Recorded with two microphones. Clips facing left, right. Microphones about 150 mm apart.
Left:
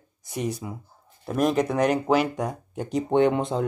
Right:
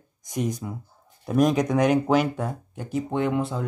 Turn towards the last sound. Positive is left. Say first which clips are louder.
# left 4 dB
turn(degrees=25)  # may be behind; listen again after turning